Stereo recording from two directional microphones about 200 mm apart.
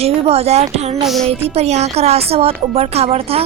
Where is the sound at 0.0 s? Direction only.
30° right (ahead or behind).